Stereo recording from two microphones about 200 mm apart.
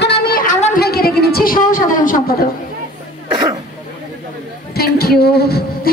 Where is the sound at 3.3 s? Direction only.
20° right (ahead or behind).